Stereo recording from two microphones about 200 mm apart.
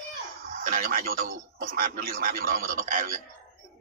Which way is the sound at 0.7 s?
45° right (ahead or behind).